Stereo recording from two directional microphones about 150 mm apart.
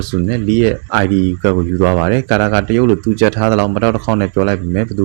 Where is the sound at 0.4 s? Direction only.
15° right (ahead or behind).